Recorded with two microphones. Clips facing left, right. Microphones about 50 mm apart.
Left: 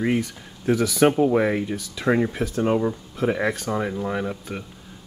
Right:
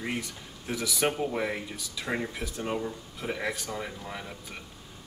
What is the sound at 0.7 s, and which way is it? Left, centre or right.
Speech, left.